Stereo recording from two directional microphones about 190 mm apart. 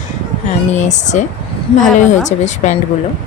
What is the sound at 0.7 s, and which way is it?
Speech, 40° left (ahead or behind).